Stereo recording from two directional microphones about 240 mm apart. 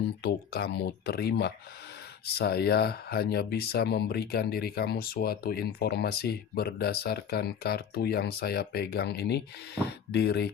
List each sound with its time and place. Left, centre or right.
0.2 s speech: left